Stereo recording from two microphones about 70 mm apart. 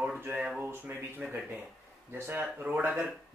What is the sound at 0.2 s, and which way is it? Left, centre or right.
Speech, right.